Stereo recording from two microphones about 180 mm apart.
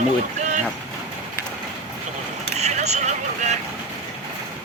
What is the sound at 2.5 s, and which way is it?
Vehicle, 40° right (ahead or behind).